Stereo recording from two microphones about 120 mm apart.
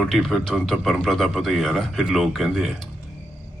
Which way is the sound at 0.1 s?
Centre (ahead or behind).